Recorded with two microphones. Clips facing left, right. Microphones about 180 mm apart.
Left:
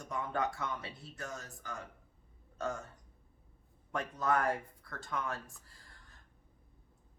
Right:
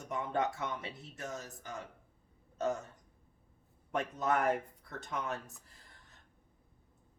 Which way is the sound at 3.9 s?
20° right (ahead or behind).